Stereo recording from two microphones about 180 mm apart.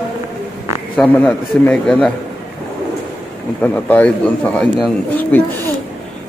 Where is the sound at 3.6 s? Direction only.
10° left (ahead or behind).